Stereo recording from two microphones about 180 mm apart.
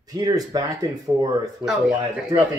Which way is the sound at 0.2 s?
20° right (ahead or behind).